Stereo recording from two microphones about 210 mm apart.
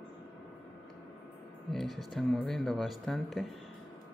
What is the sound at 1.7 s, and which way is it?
Speech, centre (ahead or behind).